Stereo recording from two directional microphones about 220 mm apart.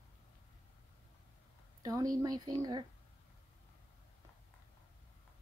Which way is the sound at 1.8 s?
15° right (ahead or behind).